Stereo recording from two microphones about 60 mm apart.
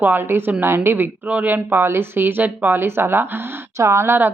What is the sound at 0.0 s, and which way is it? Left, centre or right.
A woman's voice, right.